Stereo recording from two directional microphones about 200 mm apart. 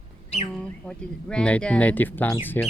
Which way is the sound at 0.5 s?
5° left (ahead or behind).